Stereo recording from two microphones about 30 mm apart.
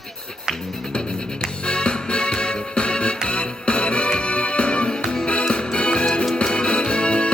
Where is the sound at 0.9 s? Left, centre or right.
Left.